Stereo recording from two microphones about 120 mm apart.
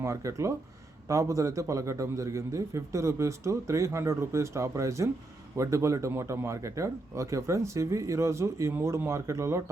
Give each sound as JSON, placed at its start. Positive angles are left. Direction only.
{"t": 0.0, "sound": "speech", "side_deg": -25}